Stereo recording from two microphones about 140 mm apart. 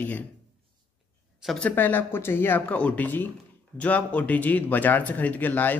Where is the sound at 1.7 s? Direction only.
15° left (ahead or behind).